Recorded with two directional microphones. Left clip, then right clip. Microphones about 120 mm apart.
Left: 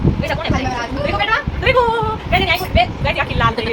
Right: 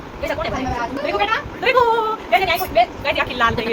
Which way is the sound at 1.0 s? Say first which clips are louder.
Left 3 dB; centre (ahead or behind).